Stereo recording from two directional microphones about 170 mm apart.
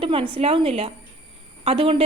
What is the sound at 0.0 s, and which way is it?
A woman's voice, 35° right (ahead or behind).